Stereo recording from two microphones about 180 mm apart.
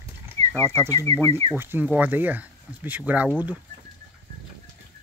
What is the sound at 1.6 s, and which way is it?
Speech, 10° right (ahead or behind).